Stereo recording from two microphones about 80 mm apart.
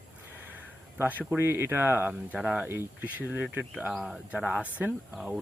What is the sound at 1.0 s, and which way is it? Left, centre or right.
Speech, right.